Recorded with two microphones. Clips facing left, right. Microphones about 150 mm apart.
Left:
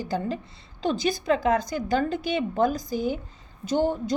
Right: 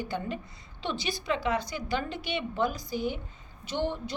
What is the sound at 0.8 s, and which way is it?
A woman's voice, 45° left (ahead or behind).